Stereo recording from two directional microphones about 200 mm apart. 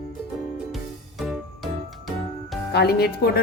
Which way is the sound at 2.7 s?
50° left (ahead or behind).